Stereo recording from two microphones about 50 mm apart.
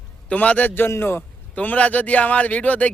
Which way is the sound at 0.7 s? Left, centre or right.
Left.